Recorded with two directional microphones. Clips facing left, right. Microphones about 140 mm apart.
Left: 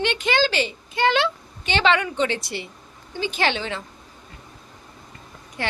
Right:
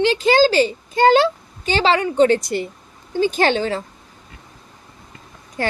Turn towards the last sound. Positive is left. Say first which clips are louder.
# right 6 dB
turn(degrees=-40)  # may be behind; listen again after turning